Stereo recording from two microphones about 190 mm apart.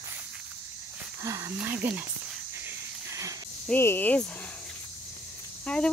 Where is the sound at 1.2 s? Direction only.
15° right (ahead or behind).